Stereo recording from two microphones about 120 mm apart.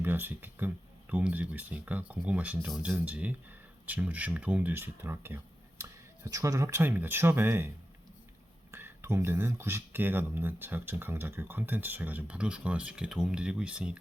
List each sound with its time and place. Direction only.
0.0 s speech: 15° right (ahead or behind)
8.7 s speech: 20° right (ahead or behind)